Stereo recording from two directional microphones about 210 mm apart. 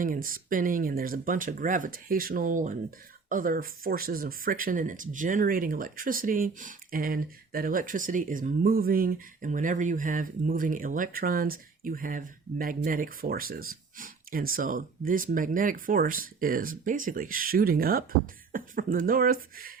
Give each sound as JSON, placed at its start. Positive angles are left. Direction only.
{"t": 0.0, "sound": "speech", "side_deg": -40}